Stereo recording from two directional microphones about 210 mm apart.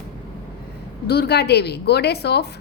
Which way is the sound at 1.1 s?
50° left (ahead or behind).